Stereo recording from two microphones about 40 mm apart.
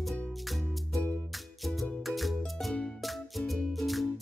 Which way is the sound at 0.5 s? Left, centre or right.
Centre.